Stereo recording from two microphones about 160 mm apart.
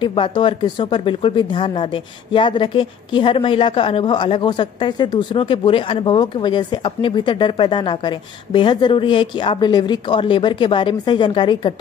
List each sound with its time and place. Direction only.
0.0 s a woman's voice: 30° left (ahead or behind)